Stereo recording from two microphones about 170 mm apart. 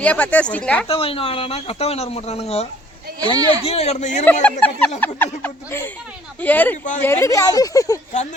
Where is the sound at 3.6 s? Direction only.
35° left (ahead or behind).